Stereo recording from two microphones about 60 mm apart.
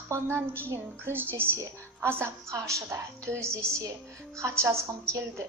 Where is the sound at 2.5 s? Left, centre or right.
Right.